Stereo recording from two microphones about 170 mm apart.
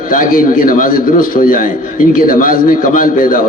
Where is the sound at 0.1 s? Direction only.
55° left (ahead or behind).